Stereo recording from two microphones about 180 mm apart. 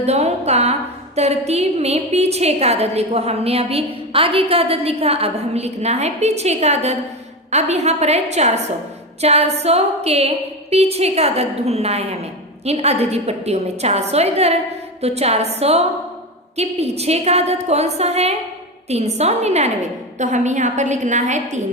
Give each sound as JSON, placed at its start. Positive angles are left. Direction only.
{"t": 0.0, "sound": "a woman's voice", "side_deg": -35}